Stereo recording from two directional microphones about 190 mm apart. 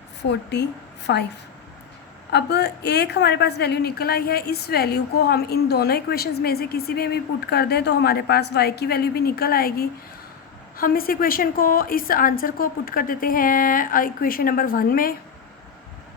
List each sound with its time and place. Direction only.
0.2 s a woman's voice: 65° left (ahead or behind)
2.3 s a woman's voice: 60° left (ahead or behind)